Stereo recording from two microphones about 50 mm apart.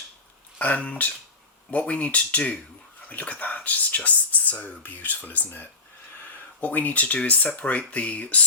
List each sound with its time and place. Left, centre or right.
0.6 s speech: left